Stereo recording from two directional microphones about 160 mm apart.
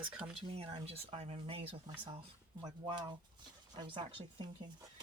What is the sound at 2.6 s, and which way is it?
Speech, 25° right (ahead or behind).